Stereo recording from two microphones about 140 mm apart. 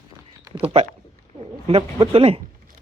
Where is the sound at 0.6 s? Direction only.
45° right (ahead or behind).